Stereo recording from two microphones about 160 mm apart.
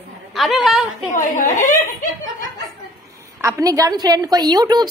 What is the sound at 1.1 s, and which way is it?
Speech, 50° left (ahead or behind).